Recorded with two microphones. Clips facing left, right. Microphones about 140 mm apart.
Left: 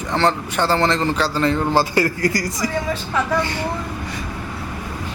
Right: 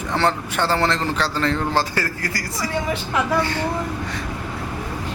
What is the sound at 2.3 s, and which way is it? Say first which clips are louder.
Speech: left 5 dB; 20° left (ahead or behind).